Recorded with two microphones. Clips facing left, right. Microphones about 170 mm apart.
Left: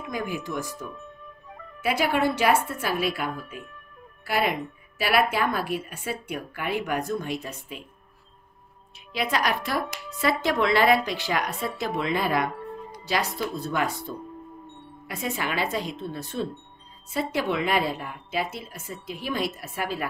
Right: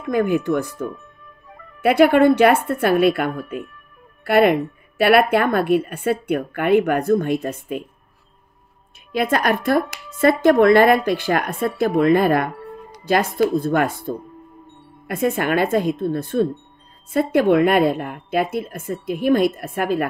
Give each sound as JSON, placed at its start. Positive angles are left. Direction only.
{"t": 0.1, "sound": "a woman's voice", "side_deg": -60}
{"t": 9.1, "sound": "a woman's voice", "side_deg": -50}